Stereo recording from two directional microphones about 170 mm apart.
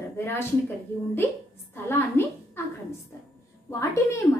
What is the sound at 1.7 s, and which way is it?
Speech, 15° left (ahead or behind).